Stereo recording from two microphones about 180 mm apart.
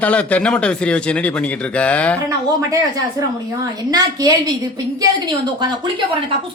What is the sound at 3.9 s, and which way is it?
Speech, 20° right (ahead or behind).